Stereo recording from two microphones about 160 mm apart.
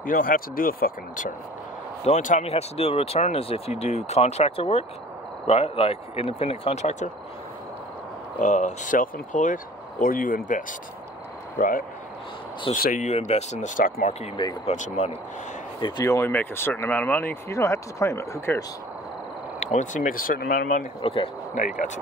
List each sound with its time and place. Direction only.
0.0 s speech: 60° left (ahead or behind)
2.0 s speech: 45° left (ahead or behind)
8.4 s speech: 50° left (ahead or behind)
14.2 s speech: 30° left (ahead or behind)
14.7 s speech: 45° left (ahead or behind)
15.8 s speech: 20° left (ahead or behind)
19.6 s speech: 50° left (ahead or behind); by 20.8 s 65° left (ahead or behind)
21.0 s speech: 35° left (ahead or behind)